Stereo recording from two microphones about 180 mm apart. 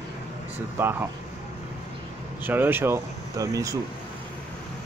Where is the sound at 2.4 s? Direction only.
10° right (ahead or behind).